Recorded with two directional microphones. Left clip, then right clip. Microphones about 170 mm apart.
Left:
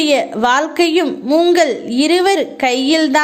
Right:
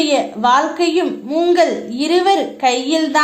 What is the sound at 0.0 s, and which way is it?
A woman's voice, 35° left (ahead or behind).